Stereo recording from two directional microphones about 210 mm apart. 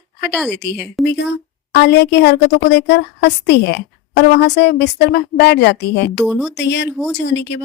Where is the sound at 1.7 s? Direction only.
55° left (ahead or behind).